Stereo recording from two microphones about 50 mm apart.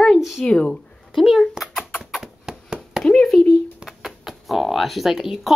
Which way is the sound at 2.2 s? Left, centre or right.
Centre.